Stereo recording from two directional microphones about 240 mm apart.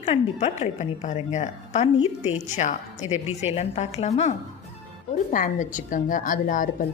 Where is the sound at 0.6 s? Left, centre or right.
Left.